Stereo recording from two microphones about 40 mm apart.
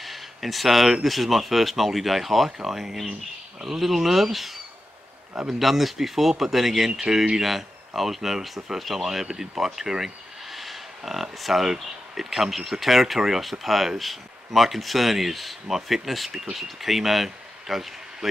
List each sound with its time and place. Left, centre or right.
0.0 s a sound: centre
1.0 s speech: centre
7.3 s speech: centre